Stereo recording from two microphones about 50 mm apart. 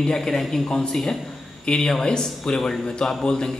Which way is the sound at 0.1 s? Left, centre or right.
Centre.